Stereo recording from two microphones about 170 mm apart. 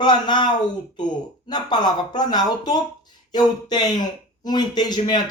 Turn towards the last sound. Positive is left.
turn(degrees=25)  # may be behind; listen again after turning